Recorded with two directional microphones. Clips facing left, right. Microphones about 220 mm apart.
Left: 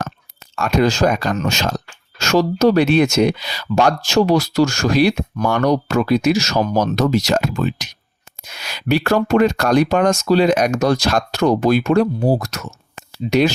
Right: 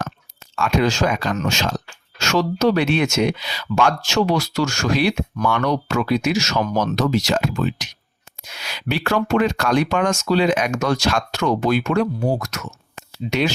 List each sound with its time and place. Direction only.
0.5 s speech: 40° left (ahead or behind)